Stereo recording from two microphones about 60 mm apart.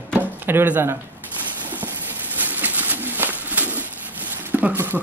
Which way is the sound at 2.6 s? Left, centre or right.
Right.